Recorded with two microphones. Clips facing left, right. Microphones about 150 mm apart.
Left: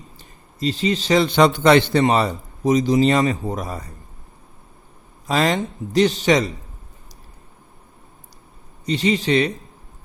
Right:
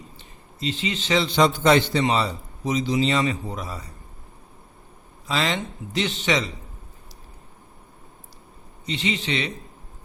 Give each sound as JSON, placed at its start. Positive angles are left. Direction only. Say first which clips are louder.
{"t": 0.2, "sound": "a man's voice", "louder": "left 7 dB", "side_deg": 40}
{"t": 5.2, "sound": "a man's voice", "louder": "left 6 dB", "side_deg": 45}
{"t": 8.9, "sound": "a man's voice", "louder": "left 8 dB", "side_deg": 40}